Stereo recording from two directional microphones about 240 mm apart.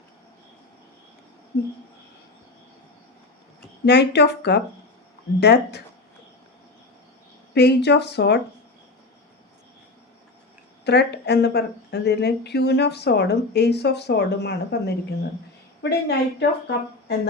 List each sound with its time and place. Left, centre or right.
3.8 s speech: left
7.5 s speech: left
10.8 s speech: left